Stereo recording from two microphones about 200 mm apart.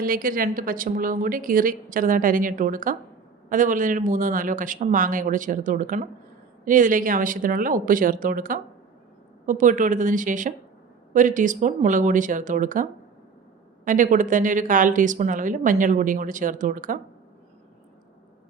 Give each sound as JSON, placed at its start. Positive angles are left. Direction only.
{"t": 0.0, "sound": "a woman's voice", "side_deg": -45}